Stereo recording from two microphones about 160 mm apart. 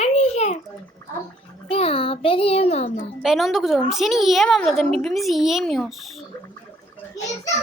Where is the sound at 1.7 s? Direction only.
35° left (ahead or behind).